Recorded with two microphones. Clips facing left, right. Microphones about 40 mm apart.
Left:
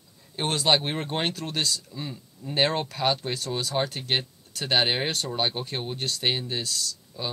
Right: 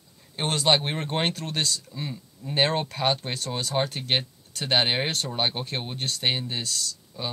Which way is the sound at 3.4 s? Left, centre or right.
Right.